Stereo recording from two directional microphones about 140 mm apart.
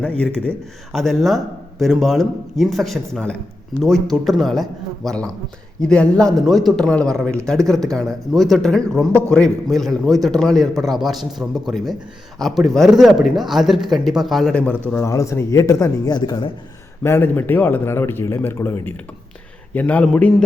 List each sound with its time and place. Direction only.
0.0 s a man's voice: 10° left (ahead or behind)
14.9 s speech: 20° left (ahead or behind)
17.0 s a man's voice: 15° left (ahead or behind)